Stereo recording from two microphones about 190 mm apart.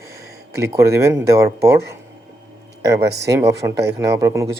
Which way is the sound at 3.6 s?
20° right (ahead or behind).